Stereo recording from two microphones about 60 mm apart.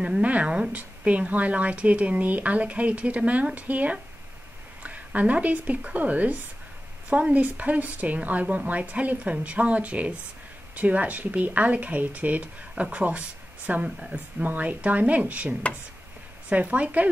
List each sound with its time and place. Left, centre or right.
0.0 s speech: right
13.8 s speech: centre
14.4 s speech: right